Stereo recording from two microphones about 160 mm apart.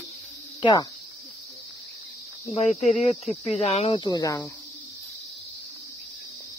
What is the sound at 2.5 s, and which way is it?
Speech, 45° left (ahead or behind).